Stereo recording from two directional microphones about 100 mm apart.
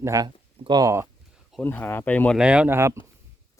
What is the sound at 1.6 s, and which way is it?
Speech, 20° left (ahead or behind).